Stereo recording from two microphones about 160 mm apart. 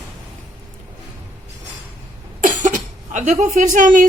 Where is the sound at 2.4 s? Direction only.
50° right (ahead or behind).